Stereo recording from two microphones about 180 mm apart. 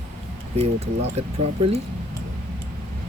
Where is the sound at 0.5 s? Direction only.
35° right (ahead or behind).